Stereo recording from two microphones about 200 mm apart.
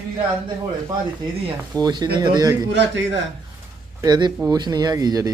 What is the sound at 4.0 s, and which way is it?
Speech, 20° right (ahead or behind).